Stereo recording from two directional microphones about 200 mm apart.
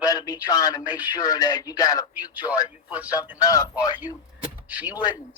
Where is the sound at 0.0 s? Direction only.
20° left (ahead or behind).